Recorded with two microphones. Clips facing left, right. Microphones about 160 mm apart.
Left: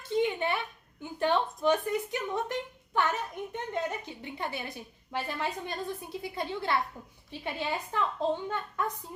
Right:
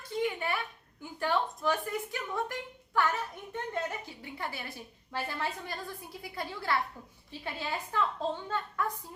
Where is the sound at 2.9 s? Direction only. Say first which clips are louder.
Left 1 dB; 20° left (ahead or behind).